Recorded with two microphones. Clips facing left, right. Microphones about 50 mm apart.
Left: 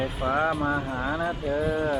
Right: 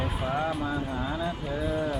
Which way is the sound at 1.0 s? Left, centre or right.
Left.